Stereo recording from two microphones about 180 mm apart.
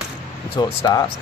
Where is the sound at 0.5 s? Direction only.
20° left (ahead or behind).